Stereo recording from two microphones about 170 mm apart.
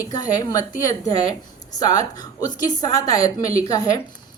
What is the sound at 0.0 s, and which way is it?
Speech, 20° left (ahead or behind).